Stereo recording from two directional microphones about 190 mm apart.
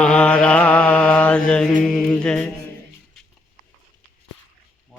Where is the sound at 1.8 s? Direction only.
5° left (ahead or behind).